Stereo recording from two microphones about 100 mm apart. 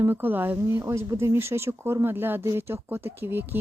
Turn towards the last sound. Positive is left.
turn(degrees=-20)  # may be behind; listen again after turning